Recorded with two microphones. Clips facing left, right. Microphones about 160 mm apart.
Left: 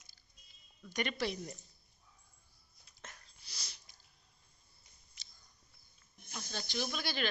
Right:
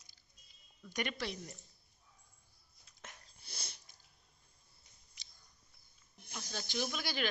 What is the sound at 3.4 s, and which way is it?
Sniff, 55° right (ahead or behind).